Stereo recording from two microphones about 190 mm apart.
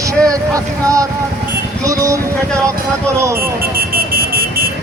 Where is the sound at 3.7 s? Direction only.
50° right (ahead or behind).